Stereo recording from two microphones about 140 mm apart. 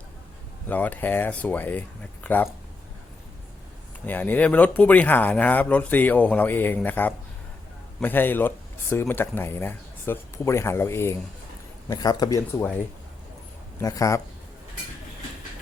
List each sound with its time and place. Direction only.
0.7 s speech: 10° left (ahead or behind)
4.0 s a man's voice: 15° left (ahead or behind)
13.7 s a man's voice: 25° left (ahead or behind)